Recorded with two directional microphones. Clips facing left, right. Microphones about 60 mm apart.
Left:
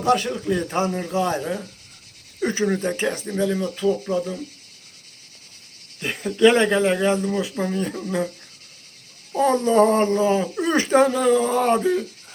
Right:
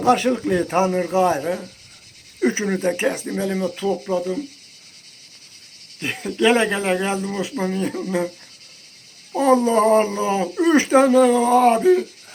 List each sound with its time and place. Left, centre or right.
0.0 s speech: right
0.3 s speech: right
0.8 s speech: right; by 4.4 s centre
6.0 s speech: centre
9.3 s speech: centre